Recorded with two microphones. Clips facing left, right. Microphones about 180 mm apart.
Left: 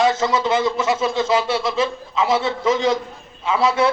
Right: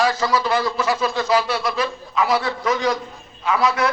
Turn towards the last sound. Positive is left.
turn(degrees=25)  # may be behind; listen again after turning